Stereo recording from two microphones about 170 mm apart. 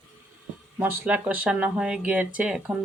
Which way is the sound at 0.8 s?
10° right (ahead or behind).